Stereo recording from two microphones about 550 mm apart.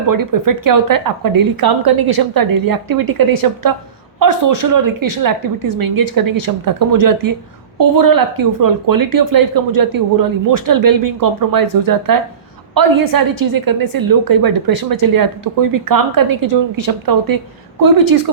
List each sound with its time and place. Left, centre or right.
0.1 s speech: right